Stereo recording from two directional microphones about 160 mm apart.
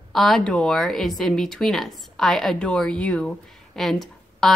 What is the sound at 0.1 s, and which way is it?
Speech, centre (ahead or behind).